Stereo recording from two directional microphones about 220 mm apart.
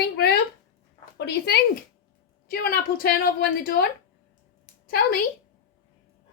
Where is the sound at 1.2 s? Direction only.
50° left (ahead or behind).